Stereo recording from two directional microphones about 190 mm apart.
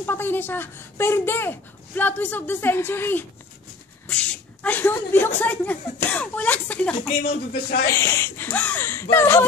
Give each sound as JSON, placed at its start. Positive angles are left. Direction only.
{"t": 0.0, "sound": "speech", "side_deg": 10}
{"t": 7.2, "sound": "speech", "side_deg": 50}
{"t": 7.9, "sound": "speech", "side_deg": 15}